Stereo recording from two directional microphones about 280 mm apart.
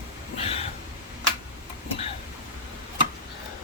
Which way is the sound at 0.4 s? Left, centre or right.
Left.